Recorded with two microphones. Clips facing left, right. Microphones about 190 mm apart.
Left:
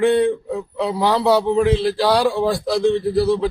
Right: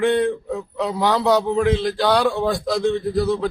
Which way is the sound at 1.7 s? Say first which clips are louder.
Left 3 dB; 30° left (ahead or behind).